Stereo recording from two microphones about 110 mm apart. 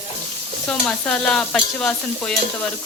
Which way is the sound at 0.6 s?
10° left (ahead or behind).